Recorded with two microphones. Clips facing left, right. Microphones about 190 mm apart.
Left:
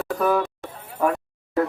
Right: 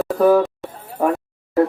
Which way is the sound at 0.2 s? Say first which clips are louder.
Right 8 dB; 30° right (ahead or behind).